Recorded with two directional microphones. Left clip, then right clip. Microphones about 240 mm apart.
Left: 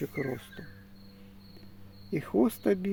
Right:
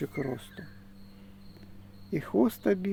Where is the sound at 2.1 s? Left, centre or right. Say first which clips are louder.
Even; centre.